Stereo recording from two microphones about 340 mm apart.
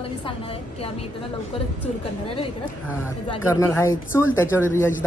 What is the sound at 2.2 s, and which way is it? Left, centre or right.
A woman's voice, centre.